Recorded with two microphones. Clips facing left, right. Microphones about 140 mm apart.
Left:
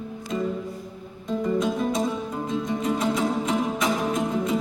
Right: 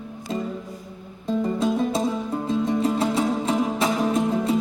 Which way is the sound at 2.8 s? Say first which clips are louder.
Right 2 dB; 30° right (ahead or behind).